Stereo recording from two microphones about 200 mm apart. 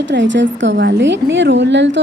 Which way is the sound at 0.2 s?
65° right (ahead or behind).